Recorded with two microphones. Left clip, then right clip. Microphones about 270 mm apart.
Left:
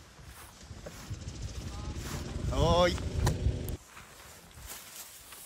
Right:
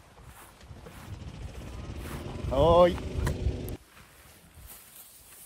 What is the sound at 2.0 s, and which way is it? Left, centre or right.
Mechanisms, centre.